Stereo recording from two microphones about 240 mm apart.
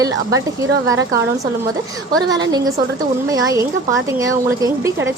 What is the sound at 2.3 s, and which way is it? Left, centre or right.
A woman's voice, centre.